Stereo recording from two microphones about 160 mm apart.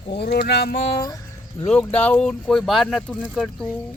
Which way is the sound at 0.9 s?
20° left (ahead or behind).